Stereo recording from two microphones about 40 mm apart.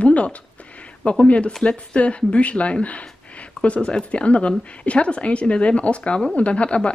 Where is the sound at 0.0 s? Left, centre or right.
Left.